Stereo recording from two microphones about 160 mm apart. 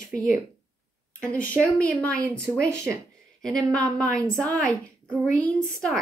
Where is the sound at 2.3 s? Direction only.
15° right (ahead or behind).